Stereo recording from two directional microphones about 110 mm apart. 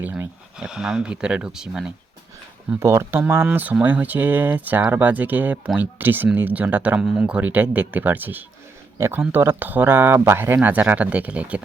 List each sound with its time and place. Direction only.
0.0 s speech: 15° right (ahead or behind)
2.8 s speech: 25° right (ahead or behind)